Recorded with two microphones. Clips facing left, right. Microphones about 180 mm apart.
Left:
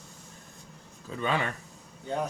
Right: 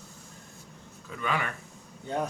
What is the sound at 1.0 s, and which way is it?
Speech, 30° left (ahead or behind).